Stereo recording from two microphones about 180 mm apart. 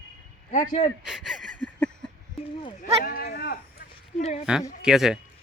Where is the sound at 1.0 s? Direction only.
Centre (ahead or behind).